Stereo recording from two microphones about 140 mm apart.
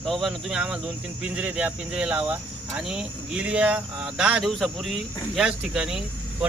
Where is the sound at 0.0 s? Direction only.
Centre (ahead or behind).